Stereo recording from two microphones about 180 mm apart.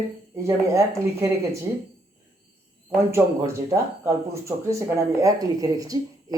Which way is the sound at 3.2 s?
20° right (ahead or behind).